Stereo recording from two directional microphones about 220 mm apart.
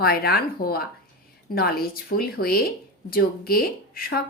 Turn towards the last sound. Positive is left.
turn(degrees=45)  # may be behind; listen again after turning